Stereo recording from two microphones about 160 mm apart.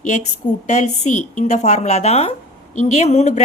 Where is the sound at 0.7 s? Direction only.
50° left (ahead or behind).